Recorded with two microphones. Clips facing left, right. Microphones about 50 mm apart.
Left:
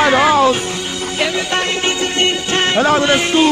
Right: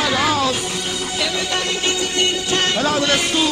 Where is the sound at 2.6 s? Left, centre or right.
Left.